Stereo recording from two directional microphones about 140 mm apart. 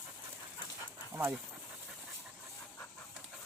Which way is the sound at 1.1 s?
15° right (ahead or behind).